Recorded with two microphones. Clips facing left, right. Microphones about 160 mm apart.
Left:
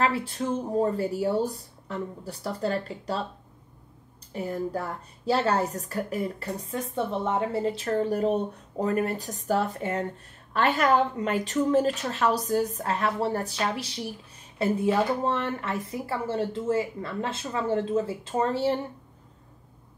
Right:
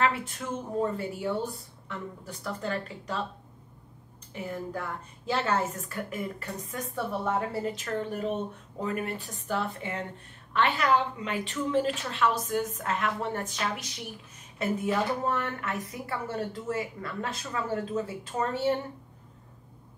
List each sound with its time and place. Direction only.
0.0 s a woman's voice: 35° left (ahead or behind)
4.3 s a woman's voice: 35° left (ahead or behind)
7.0 s a woman's voice: 25° left (ahead or behind)